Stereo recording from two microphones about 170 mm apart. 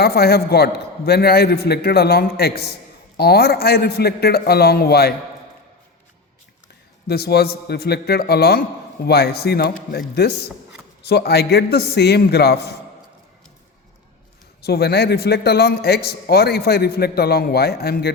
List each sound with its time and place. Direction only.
0.0 s a man's voice: 70° left (ahead or behind)
7.1 s a man's voice: 70° left (ahead or behind)
14.6 s a man's voice: 70° left (ahead or behind)